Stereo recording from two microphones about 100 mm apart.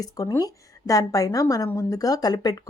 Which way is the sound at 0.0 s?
35° left (ahead or behind).